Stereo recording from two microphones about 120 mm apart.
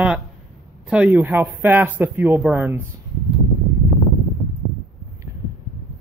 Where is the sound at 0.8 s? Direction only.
10° right (ahead or behind).